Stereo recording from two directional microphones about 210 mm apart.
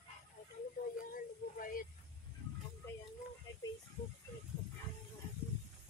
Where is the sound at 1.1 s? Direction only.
40° left (ahead or behind).